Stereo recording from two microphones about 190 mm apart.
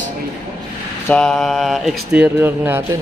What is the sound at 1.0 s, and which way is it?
Speech, 5° left (ahead or behind).